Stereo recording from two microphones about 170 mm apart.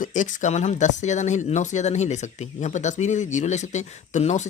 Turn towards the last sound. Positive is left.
turn(degrees=45)  # may be behind; listen again after turning